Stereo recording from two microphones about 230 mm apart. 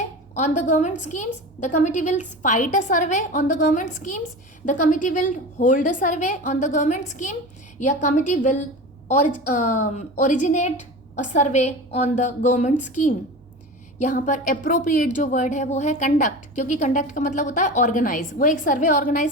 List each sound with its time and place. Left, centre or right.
0.3 s speech: left